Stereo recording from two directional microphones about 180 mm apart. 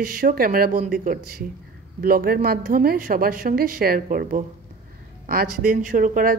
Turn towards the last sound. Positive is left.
turn(degrees=-50)  # may be behind; listen again after turning